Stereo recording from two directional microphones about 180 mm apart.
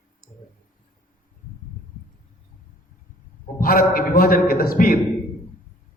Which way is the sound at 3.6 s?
55° left (ahead or behind).